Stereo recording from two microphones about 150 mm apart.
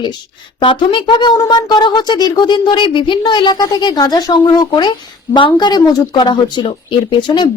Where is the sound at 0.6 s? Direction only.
35° left (ahead or behind).